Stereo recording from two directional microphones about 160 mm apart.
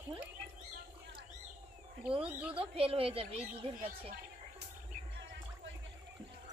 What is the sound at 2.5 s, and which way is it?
A woman's voice, 35° right (ahead or behind).